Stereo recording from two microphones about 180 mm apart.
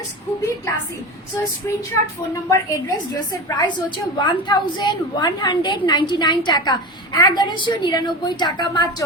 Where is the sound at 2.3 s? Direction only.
15° left (ahead or behind).